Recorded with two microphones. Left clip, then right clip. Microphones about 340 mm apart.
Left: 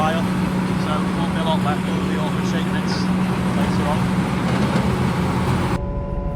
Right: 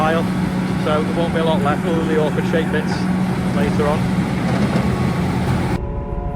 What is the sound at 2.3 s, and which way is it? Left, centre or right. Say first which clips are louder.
Vehicle: right 5 dB; centre.